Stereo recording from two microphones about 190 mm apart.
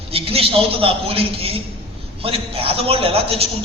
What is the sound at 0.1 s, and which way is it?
A man's voice, 30° right (ahead or behind).